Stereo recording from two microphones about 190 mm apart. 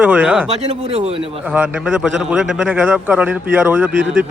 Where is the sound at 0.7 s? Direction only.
35° right (ahead or behind).